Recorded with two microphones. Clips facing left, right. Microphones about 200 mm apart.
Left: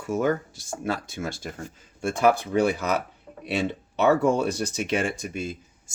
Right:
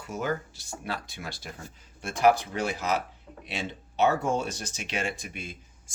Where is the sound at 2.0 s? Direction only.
55° left (ahead or behind).